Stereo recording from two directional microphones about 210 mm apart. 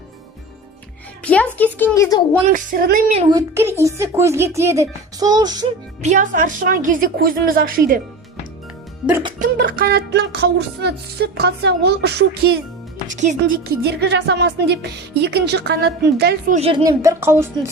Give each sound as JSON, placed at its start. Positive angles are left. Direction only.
{"t": 1.2, "sound": "speech", "side_deg": 5}
{"t": 2.5, "sound": "a woman's voice", "side_deg": -40}
{"t": 3.2, "sound": "a woman's voice", "side_deg": -15}
{"t": 6.0, "sound": "a woman's voice", "side_deg": -35}
{"t": 9.4, "sound": "music", "side_deg": -40}
{"t": 13.1, "sound": "speech", "side_deg": -35}
{"t": 13.5, "sound": "music", "side_deg": -55}
{"t": 16.6, "sound": "speech", "side_deg": -25}
{"t": 16.8, "sound": "a woman's voice", "side_deg": -15}